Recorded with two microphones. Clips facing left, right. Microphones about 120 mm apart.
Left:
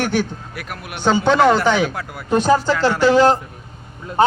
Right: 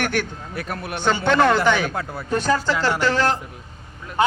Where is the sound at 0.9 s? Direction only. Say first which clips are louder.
Left 3 dB; 10° left (ahead or behind).